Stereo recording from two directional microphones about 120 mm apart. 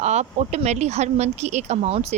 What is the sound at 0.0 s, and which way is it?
Speech, 65° right (ahead or behind).